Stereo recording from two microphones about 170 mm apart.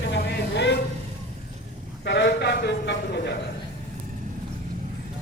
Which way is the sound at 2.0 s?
90° left.